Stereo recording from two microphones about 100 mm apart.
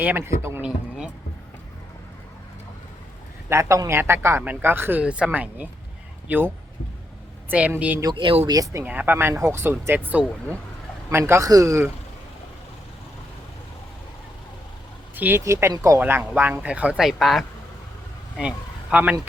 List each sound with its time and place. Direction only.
0.0 s speech: 20° right (ahead or behind)
0.6 s speech: 10° right (ahead or behind)
3.5 s speech: 30° right (ahead or behind)
7.5 s speech: 10° right (ahead or behind)
8.1 s speech: 60° right (ahead or behind)
8.4 s speech: 35° right (ahead or behind)
8.8 s speech: 20° right (ahead or behind)
15.1 s speech: 20° right (ahead or behind)
17.0 s speech: centre (ahead or behind)